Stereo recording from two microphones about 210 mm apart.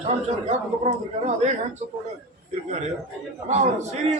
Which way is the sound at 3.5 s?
35° right (ahead or behind).